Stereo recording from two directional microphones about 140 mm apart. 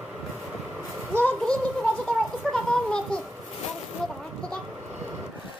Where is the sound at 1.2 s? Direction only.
10° left (ahead or behind).